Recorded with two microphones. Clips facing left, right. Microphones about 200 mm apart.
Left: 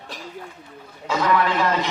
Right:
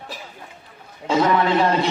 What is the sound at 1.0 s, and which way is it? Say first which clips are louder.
Speech: right 3 dB; 25° right (ahead or behind).